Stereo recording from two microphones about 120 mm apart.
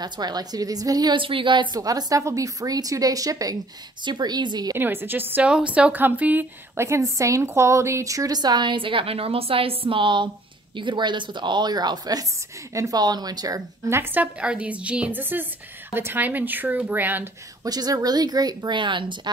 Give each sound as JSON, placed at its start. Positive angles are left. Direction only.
{"t": 0.0, "sound": "a woman's voice", "side_deg": -35}
{"t": 4.7, "sound": "a woman's voice", "side_deg": -15}
{"t": 13.8, "sound": "a woman's voice", "side_deg": -20}
{"t": 17.6, "sound": "a woman's voice", "side_deg": -30}